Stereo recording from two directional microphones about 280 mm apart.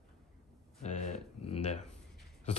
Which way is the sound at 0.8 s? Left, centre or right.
Left.